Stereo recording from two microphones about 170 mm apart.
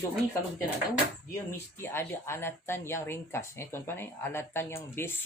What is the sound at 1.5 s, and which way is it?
Speech, 15° left (ahead or behind).